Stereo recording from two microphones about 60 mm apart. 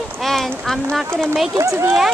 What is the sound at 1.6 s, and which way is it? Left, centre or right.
Speech, right.